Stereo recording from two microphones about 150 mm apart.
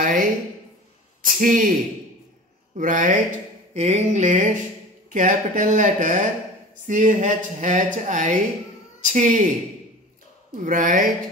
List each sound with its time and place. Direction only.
0.0 s a woman's voice: 65° right (ahead or behind)
2.7 s speech: 60° right (ahead or behind)
10.6 s speech: 65° right (ahead or behind)